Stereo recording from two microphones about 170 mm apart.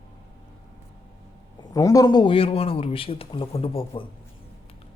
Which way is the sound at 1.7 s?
20° left (ahead or behind).